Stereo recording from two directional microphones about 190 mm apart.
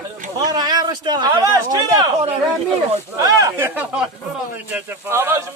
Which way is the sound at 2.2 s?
35° right (ahead or behind).